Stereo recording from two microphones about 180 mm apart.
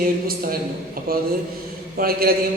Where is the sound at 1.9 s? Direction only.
55° right (ahead or behind).